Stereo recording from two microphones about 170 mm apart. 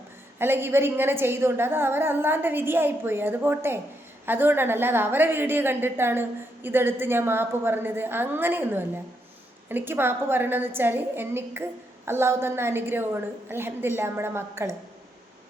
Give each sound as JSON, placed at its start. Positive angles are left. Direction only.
{"t": 0.3, "sound": "a woman's voice", "side_deg": -15}